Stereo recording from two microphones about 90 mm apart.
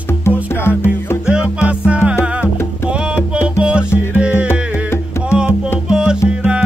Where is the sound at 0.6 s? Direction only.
30° left (ahead or behind).